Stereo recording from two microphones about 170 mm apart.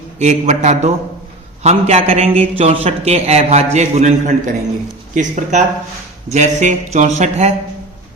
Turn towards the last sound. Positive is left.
turn(degrees=-40)  # may be behind; listen again after turning